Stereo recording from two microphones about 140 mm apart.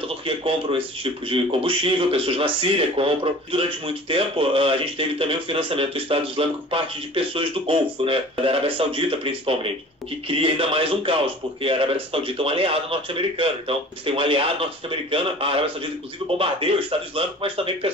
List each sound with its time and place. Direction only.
0.2 s speech: 40° right (ahead or behind)